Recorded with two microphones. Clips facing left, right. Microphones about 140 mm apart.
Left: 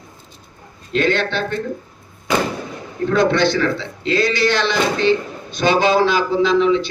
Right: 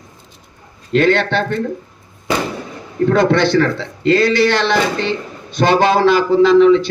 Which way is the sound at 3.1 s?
60° right (ahead or behind).